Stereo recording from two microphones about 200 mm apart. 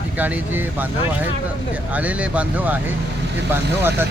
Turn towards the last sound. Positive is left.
turn(degrees=-10)  # may be behind; listen again after turning